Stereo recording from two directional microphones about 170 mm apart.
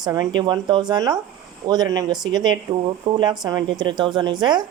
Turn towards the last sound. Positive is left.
turn(degrees=-25)  # may be behind; listen again after turning